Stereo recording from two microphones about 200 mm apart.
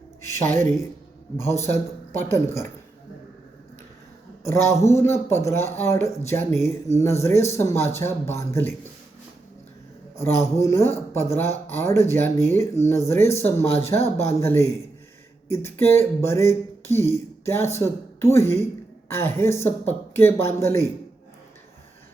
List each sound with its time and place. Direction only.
0.4 s speech: 40° right (ahead or behind)
1.5 s a man's voice: 15° left (ahead or behind)
4.4 s a man's voice: 15° left (ahead or behind)
10.2 s a man's voice: 15° left (ahead or behind)